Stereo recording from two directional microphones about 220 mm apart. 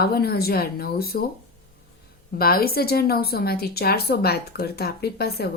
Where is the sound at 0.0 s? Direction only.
45° left (ahead or behind).